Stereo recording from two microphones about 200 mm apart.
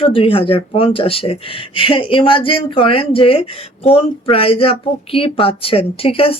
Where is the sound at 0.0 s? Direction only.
25° left (ahead or behind).